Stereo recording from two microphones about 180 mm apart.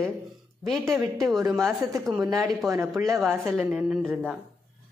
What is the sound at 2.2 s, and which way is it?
Speech, 20° right (ahead or behind).